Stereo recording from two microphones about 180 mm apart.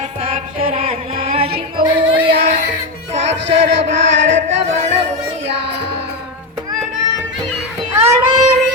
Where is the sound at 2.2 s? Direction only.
65° right (ahead or behind).